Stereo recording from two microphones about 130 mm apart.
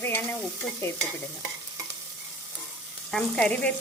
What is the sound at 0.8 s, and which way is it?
Stir, 20° left (ahead or behind).